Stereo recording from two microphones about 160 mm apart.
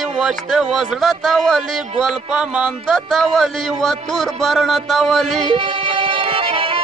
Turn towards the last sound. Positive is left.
turn(degrees=-35)  # may be behind; listen again after turning